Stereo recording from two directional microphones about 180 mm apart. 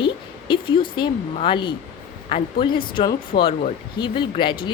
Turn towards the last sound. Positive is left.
turn(degrees=25)  # may be behind; listen again after turning